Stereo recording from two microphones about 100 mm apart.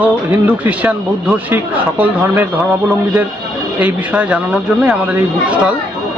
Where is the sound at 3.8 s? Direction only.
15° right (ahead or behind).